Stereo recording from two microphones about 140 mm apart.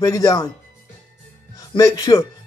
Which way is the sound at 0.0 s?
25° left (ahead or behind).